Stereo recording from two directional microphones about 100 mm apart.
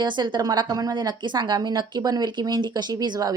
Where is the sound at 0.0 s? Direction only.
50° right (ahead or behind).